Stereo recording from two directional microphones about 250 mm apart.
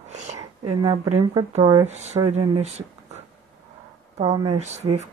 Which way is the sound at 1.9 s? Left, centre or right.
Right.